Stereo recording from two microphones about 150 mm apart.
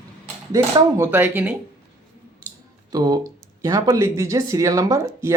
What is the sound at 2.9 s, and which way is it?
Speech, 25° right (ahead or behind).